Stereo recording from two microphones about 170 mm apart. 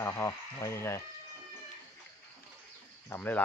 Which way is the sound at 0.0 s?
15° left (ahead or behind).